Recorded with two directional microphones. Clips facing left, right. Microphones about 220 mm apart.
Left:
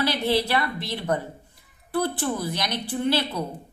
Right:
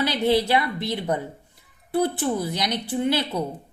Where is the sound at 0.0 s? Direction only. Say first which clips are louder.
Right 2 dB; 20° right (ahead or behind).